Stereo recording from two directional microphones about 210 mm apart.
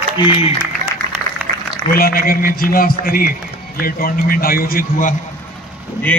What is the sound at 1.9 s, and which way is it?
A man's voice, 45° left (ahead or behind).